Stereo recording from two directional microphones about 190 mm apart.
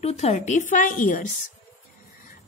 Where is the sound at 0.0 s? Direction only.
35° left (ahead or behind).